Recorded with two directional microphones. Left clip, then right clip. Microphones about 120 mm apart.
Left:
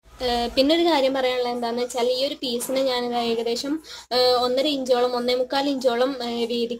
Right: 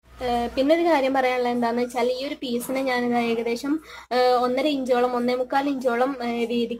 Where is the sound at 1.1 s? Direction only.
30° right (ahead or behind).